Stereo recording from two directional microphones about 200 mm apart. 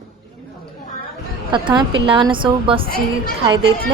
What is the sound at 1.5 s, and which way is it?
A woman's voice, 25° right (ahead or behind).